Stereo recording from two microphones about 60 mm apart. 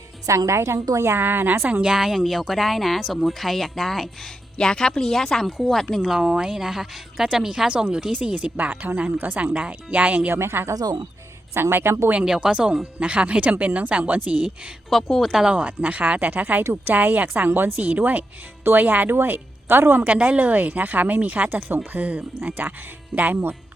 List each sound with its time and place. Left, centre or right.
0.3 s a woman's voice: right
0.9 s a woman's voice: right
1.8 s speech: centre
4.5 s speech: centre
6.0 s a woman's voice: centre
8.1 s speech: right
10.3 s speech: right
10.7 s speech: right
11.5 s speech: right
12.2 s a woman's voice: centre
14.8 s speech: centre
15.5 s a woman's voice: right
20.1 s a woman's voice: right